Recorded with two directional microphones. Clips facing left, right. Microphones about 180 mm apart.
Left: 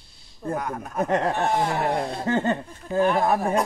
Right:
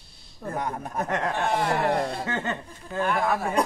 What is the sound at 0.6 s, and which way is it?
Speech, 30° right (ahead or behind).